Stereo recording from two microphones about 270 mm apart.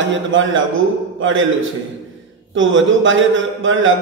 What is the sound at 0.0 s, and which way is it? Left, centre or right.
A man's voice, right.